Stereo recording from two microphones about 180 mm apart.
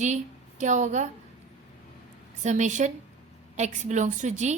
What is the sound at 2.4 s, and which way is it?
A woman's voice, 40° right (ahead or behind).